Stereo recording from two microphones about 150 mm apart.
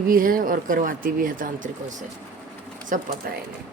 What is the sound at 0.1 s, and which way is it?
Speech, 70° right (ahead or behind).